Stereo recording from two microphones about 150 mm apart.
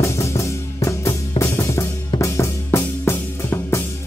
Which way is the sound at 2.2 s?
20° left (ahead or behind).